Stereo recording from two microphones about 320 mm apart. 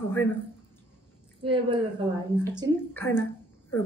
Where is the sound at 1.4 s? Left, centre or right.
Centre.